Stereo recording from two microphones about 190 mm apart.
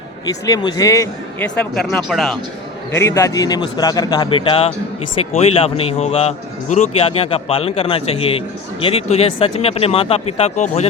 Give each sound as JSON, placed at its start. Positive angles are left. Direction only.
{"t": 0.4, "sound": "speech", "side_deg": 20}
{"t": 2.9, "sound": "a man's voice", "side_deg": 15}